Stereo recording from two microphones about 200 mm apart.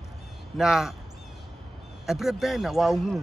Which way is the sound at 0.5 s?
Centre (ahead or behind).